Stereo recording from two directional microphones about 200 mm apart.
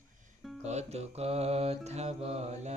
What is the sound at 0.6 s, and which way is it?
Mantra, 35° right (ahead or behind).